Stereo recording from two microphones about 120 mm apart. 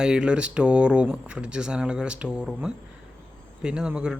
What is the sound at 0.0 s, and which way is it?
Speech, 5° right (ahead or behind).